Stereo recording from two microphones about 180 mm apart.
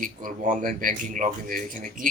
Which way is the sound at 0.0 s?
50° right (ahead or behind).